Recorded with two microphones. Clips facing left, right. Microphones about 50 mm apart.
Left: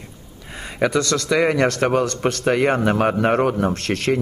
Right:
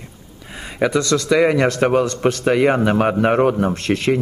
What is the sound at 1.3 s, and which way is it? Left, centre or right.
Speech, centre.